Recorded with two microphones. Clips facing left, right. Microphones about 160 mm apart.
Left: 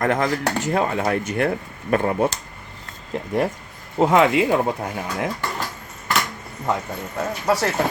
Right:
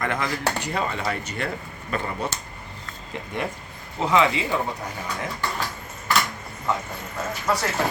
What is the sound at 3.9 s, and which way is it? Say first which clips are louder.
Speech: left 5 dB; 50° left (ahead or behind).